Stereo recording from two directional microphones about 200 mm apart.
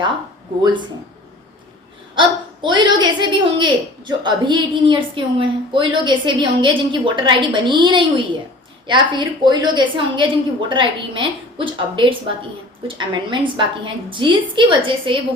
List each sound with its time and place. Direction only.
0.6 s a woman's voice: 25° right (ahead or behind)
2.1 s a woman's voice: 25° right (ahead or behind)